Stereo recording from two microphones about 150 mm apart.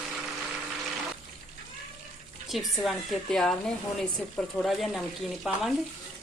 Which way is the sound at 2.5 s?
Centre (ahead or behind).